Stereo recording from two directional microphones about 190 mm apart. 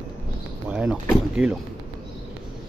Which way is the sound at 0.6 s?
5° right (ahead or behind).